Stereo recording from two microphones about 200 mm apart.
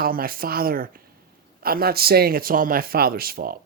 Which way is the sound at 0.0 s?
45° right (ahead or behind).